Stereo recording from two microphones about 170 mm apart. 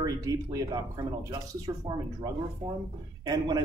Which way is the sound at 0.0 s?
20° right (ahead or behind).